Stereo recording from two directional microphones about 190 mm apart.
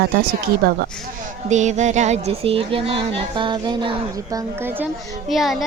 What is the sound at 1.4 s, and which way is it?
Speech, 40° right (ahead or behind).